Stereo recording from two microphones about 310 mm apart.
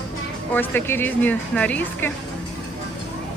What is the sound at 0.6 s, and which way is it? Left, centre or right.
Speech, centre.